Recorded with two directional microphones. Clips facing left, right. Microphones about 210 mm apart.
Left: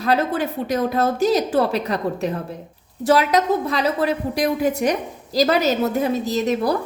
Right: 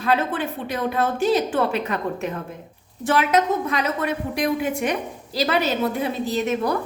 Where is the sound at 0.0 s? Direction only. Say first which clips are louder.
Left 2 dB; 40° left (ahead or behind).